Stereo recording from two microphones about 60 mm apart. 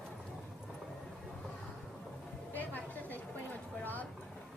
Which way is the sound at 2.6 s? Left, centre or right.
Left.